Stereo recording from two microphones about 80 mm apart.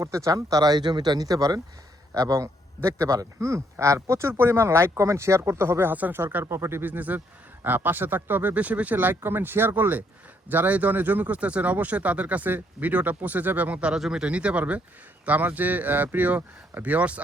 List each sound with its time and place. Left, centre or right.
0.0 s speech: right; by 17.2 s centre